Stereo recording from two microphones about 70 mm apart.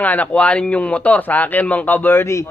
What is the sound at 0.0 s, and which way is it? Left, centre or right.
Speech, left.